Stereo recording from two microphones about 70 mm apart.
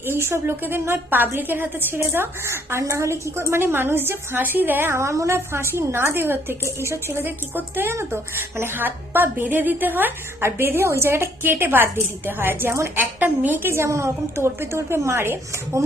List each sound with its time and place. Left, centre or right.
0.0 s a woman's voice: right
13.0 s a woman's voice: right